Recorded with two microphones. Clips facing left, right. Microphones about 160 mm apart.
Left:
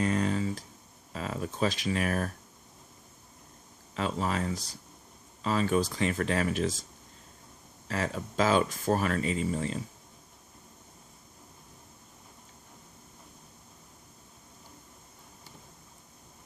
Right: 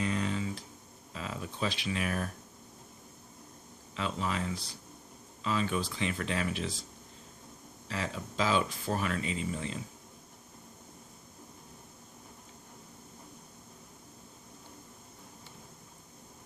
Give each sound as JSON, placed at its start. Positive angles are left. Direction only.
{"t": 0.0, "sound": "computer keyboard", "side_deg": 45}
{"t": 1.1, "sound": "speech", "side_deg": 45}
{"t": 3.9, "sound": "speech", "side_deg": 45}
{"t": 7.9, "sound": "speech", "side_deg": 45}